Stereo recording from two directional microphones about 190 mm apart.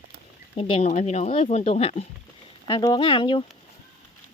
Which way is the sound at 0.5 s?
30° left (ahead or behind).